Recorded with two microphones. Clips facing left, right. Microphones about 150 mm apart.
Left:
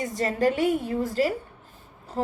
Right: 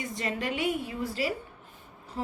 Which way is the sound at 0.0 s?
45° left (ahead or behind).